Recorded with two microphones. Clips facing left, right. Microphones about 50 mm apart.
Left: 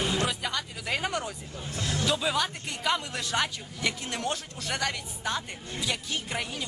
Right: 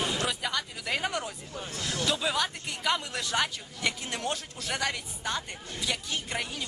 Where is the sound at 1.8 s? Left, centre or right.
Left.